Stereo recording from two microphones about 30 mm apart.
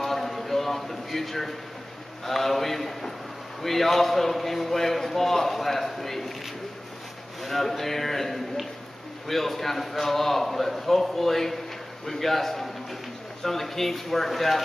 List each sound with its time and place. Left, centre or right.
0.0 s a sound: centre
2.2 s a man's voice: centre
7.4 s a man's voice: centre